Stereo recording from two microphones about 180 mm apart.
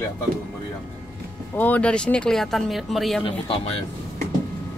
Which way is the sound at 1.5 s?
10° left (ahead or behind).